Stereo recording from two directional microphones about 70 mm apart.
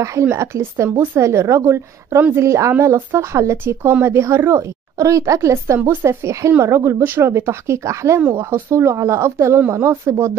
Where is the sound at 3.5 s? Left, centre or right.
Right.